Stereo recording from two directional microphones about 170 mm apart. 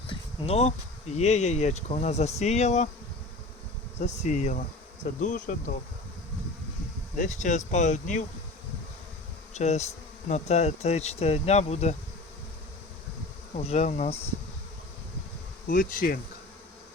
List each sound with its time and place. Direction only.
0.1 s bee: 35° left (ahead or behind)
1.2 s speech: 40° left (ahead or behind)
4.0 s speech: 40° left (ahead or behind)
7.2 s speech: 45° left (ahead or behind)
9.6 s speech: 40° left (ahead or behind)
13.6 s speech: 40° left (ahead or behind)
15.6 s bee: 55° left (ahead or behind)